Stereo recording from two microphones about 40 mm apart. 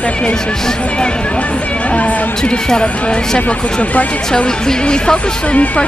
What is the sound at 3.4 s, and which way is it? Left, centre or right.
Speech, left.